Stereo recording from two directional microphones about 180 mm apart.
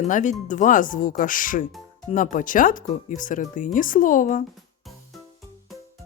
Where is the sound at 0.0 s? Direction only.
45° left (ahead or behind).